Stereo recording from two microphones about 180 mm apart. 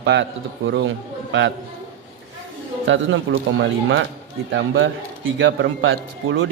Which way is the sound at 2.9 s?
90° right.